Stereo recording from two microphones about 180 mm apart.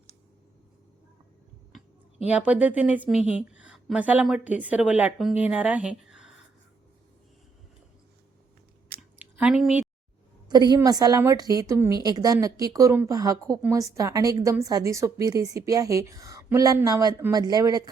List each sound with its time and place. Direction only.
2.2 s a woman's voice: 5° right (ahead or behind)
9.0 s a sound: 5° right (ahead or behind)
10.5 s a woman's voice: 25° right (ahead or behind)